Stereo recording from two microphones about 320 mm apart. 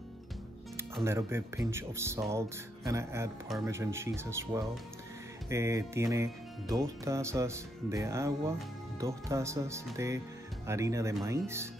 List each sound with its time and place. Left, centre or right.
0.9 s speech: centre